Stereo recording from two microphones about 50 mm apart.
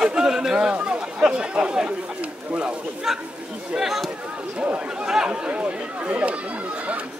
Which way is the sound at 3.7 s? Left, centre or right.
Centre.